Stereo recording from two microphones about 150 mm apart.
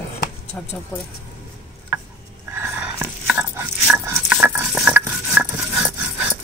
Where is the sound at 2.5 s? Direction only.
15° right (ahead or behind).